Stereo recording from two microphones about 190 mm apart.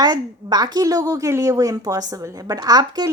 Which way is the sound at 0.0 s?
20° right (ahead or behind).